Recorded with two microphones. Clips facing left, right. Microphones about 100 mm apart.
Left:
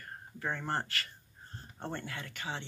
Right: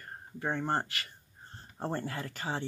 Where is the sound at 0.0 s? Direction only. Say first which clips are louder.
Right 2 dB; 20° right (ahead or behind).